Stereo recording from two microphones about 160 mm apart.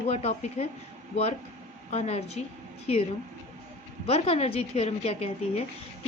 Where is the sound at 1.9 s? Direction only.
40° left (ahead or behind).